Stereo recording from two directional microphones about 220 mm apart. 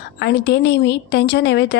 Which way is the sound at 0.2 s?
50° left (ahead or behind).